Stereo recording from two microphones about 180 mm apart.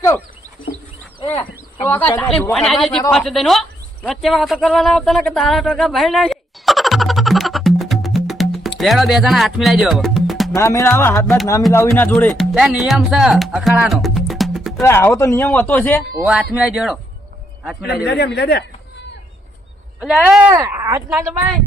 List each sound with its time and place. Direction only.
1.3 s speech: 15° left (ahead or behind)
3.1 s a sound: centre (ahead or behind)
8.8 s speech: centre (ahead or behind)
10.5 s speech: 15° left (ahead or behind); by 14.7 s centre (ahead or behind)
14.8 s speech: 15° left (ahead or behind)
16.3 s speech: 5° right (ahead or behind)
17.8 s speech: 60° left (ahead or behind)
20.0 s a woman's voice: 5° right (ahead or behind)